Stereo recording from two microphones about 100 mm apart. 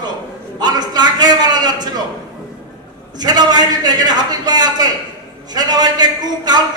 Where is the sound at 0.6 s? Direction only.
45° right (ahead or behind).